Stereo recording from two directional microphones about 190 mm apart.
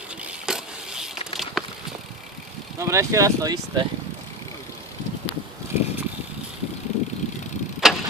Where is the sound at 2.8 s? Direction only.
15° right (ahead or behind).